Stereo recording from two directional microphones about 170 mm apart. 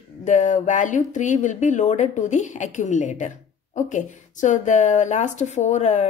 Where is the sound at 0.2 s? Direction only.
45° left (ahead or behind).